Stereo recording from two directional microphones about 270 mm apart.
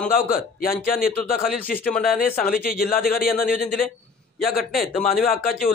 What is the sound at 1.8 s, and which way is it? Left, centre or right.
Speech, centre.